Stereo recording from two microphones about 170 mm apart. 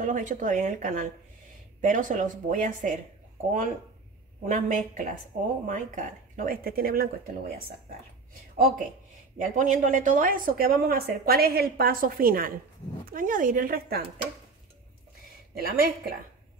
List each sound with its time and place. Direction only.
0.0 s speech: 50° right (ahead or behind)
4.5 s speech: 50° right (ahead or behind)
9.4 s speech: 50° right (ahead or behind); by 14.2 s 65° right (ahead or behind)
15.6 s speech: 60° right (ahead or behind)